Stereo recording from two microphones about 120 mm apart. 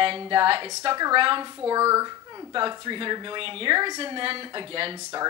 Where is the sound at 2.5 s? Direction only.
40° right (ahead or behind).